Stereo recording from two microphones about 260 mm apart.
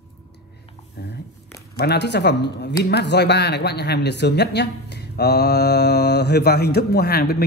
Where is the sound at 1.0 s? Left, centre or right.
Left.